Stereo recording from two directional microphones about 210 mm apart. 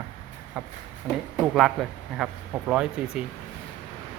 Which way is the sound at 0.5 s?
5° right (ahead or behind).